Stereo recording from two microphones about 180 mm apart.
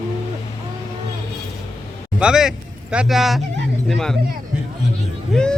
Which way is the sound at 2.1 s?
5° right (ahead or behind).